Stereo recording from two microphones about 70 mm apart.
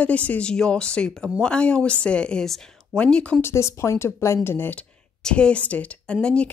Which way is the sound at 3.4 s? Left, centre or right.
Left.